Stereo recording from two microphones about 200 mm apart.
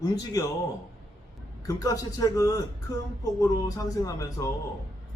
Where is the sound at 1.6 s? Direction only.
15° left (ahead or behind).